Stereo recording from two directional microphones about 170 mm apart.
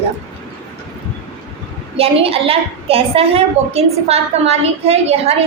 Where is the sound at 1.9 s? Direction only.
35° right (ahead or behind).